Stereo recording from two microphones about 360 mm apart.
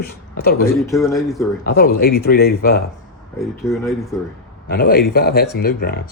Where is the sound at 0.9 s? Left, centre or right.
Centre.